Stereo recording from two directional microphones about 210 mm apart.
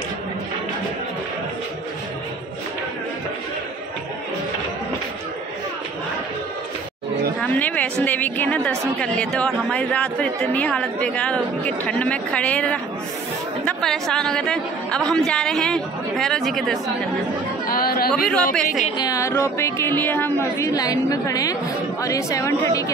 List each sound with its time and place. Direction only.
7.3 s a sound: 5° left (ahead or behind)
8.0 s a woman's voice: 10° left (ahead or behind)
17.6 s chatter: 45° left (ahead or behind)
18.3 s a woman's voice: 5° left (ahead or behind)
18.9 s speech: 15° left (ahead or behind)